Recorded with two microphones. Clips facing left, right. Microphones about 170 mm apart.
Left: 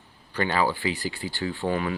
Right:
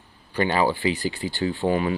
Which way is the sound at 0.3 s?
20° right (ahead or behind).